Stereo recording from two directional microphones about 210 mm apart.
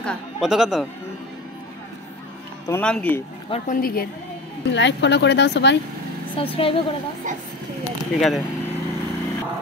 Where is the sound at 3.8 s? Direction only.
45° left (ahead or behind).